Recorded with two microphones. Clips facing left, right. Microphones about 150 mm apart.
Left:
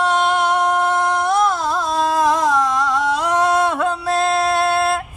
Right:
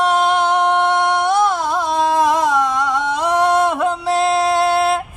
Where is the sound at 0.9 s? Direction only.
20° right (ahead or behind).